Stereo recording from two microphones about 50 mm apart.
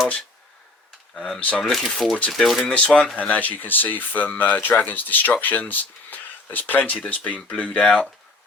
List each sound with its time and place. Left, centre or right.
1.1 s speech: centre
1.4 s speech: left
1.6 s speech: centre
2.6 s speech: left